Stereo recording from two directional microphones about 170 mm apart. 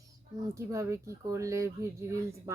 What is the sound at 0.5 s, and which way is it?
Speech, 15° right (ahead or behind).